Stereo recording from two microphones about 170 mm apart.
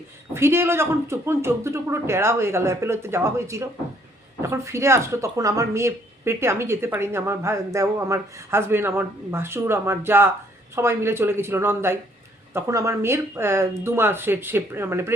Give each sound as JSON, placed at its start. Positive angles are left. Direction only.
{"t": 0.3, "sound": "a woman's voice", "side_deg": -15}